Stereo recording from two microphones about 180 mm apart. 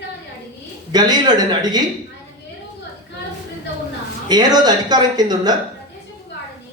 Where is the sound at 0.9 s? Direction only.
20° right (ahead or behind).